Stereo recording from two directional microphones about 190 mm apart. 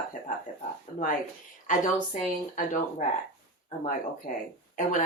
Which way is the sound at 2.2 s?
40° left (ahead or behind).